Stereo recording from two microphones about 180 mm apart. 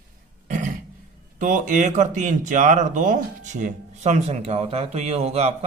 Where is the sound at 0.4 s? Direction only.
45° right (ahead or behind).